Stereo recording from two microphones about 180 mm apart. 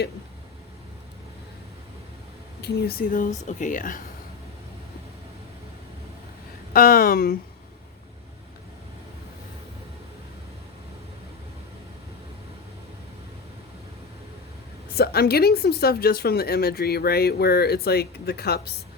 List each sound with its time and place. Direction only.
2.6 s speech: 65° left (ahead or behind); by 4.0 s 50° left (ahead or behind)
6.7 s speech: 55° left (ahead or behind)
14.9 s speech: 60° left (ahead or behind)